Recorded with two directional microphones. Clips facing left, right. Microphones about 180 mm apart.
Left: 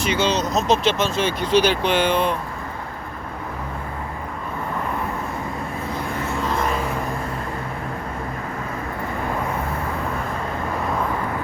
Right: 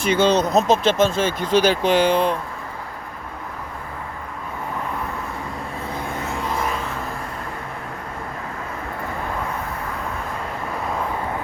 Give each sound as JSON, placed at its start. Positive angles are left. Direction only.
{"t": 0.2, "sound": "speech", "side_deg": -55}